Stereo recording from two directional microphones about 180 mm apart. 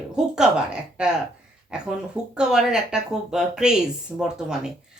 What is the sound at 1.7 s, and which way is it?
Speech, 5° right (ahead or behind).